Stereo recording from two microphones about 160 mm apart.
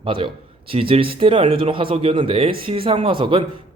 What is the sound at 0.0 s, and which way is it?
A man's voice, 35° right (ahead or behind).